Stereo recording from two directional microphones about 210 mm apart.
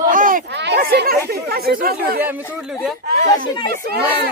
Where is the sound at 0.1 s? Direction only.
40° right (ahead or behind).